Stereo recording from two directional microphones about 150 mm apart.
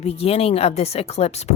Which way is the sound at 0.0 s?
40° left (ahead or behind).